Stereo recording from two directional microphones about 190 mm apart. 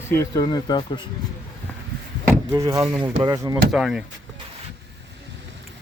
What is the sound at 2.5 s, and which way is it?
Speech, 15° right (ahead or behind).